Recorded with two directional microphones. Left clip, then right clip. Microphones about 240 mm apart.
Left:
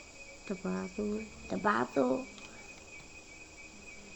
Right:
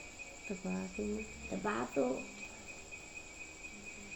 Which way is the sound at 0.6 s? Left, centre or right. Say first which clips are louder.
Left 4 dB; left.